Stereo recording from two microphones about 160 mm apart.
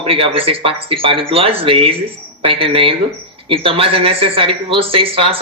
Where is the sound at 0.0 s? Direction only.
35° right (ahead or behind).